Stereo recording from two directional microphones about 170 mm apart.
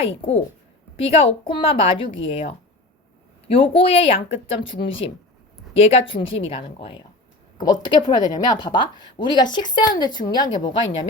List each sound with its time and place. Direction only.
0.0 s speech: 35° left (ahead or behind)